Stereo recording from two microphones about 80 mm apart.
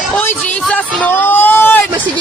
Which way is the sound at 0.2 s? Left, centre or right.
Left.